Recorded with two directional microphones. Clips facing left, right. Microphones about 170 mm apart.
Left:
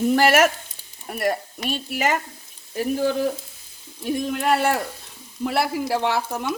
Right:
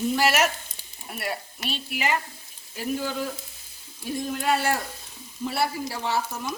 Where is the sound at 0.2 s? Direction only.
50° left (ahead or behind).